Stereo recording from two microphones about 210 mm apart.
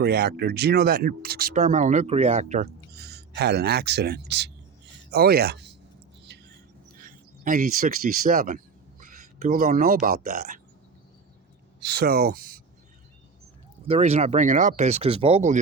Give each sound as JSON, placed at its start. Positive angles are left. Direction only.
{"t": 0.0, "sound": "speech", "side_deg": -50}
{"t": 2.9, "sound": "speech", "side_deg": -50}
{"t": 6.3, "sound": "a sound", "side_deg": -55}
{"t": 6.9, "sound": "speech", "side_deg": -40}
{"t": 11.9, "sound": "speech", "side_deg": -50}
{"t": 13.8, "sound": "speech", "side_deg": -30}